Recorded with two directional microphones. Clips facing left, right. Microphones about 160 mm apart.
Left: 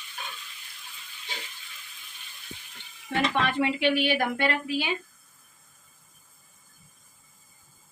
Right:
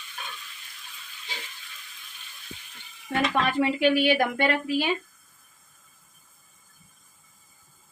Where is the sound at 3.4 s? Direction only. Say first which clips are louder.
Right 2 dB; 40° right (ahead or behind).